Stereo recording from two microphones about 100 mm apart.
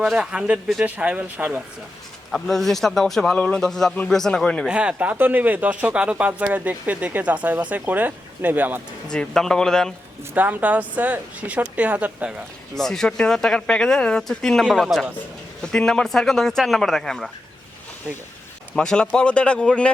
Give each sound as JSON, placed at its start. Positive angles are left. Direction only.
{"t": 0.0, "sound": "speech", "side_deg": -5}
{"t": 2.3, "sound": "speech", "side_deg": 0}
{"t": 4.6, "sound": "speech", "side_deg": -10}
{"t": 9.0, "sound": "speech", "side_deg": 5}
{"t": 10.3, "sound": "speech", "side_deg": -15}
{"t": 12.7, "sound": "speech", "side_deg": 5}
{"t": 18.8, "sound": "speech", "side_deg": 10}